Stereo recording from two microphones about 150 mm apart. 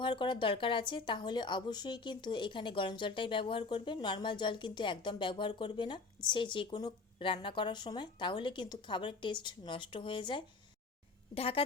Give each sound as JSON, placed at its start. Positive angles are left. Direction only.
{"t": 0.0, "sound": "speech", "side_deg": 35}